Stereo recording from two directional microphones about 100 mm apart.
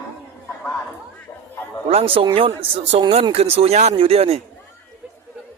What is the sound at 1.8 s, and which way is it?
Speech, 80° right.